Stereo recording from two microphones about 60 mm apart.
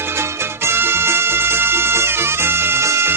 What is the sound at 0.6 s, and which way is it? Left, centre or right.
Music, right.